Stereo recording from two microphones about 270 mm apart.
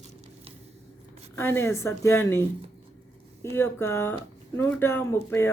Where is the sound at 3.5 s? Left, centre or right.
Centre.